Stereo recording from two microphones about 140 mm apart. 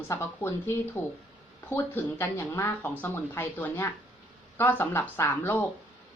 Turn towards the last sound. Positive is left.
turn(degrees=15)  # may be behind; listen again after turning